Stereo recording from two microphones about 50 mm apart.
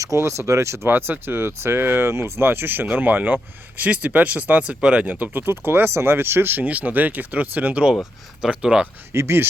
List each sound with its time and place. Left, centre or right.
0.3 s speech: right
0.9 s speech: right
2.5 s speech: right
5.0 s speech: right
6.7 s speech: right
8.4 s speech: right
9.1 s speech: right